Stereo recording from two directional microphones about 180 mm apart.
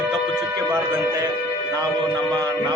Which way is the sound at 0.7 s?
20° right (ahead or behind).